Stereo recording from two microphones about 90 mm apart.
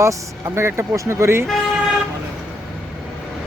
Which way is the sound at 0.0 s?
30° right (ahead or behind).